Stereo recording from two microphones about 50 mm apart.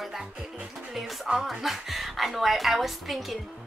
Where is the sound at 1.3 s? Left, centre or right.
Centre.